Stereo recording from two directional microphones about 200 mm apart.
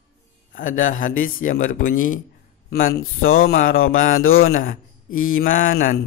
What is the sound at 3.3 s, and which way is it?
Speech, 45° left (ahead or behind).